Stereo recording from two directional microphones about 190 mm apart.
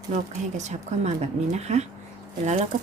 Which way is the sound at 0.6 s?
35° right (ahead or behind).